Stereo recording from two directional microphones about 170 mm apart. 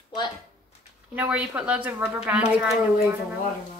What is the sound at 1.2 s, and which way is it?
A woman's voice, 5° right (ahead or behind).